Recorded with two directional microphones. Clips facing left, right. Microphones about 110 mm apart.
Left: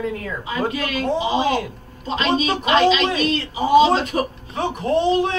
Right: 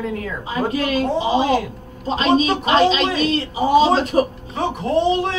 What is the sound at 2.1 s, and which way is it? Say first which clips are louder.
Speech: right 3 dB; 30° right (ahead or behind).